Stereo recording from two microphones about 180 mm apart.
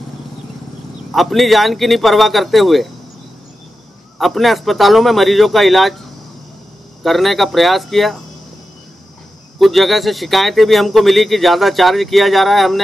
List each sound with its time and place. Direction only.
1.1 s speech: centre (ahead or behind)
4.2 s speech: centre (ahead or behind)
7.0 s speech: centre (ahead or behind)
9.6 s speech: centre (ahead or behind)